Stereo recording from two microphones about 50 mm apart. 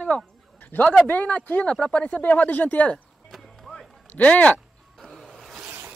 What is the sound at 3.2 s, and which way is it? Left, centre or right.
Music, centre.